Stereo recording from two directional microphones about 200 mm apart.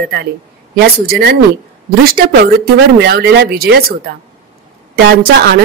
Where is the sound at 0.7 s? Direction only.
50° right (ahead or behind).